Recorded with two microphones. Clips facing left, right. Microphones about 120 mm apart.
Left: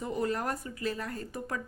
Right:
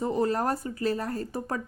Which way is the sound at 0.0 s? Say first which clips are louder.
Right 6 dB; 30° right (ahead or behind).